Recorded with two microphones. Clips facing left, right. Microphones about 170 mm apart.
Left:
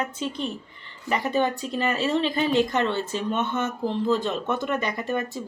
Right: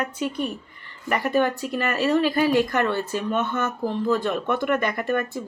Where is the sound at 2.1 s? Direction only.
25° left (ahead or behind).